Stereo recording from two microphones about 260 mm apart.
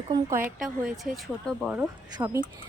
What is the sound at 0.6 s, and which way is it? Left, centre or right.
A woman's voice, centre.